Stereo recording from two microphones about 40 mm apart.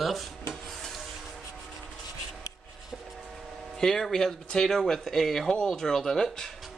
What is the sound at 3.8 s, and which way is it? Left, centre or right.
Speech, centre.